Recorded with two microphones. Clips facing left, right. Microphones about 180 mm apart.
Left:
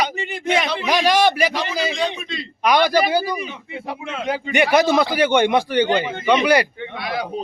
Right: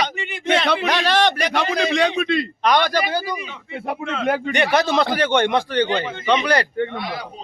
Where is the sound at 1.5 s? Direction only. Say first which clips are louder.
Right 3 dB; 65° right (ahead or behind).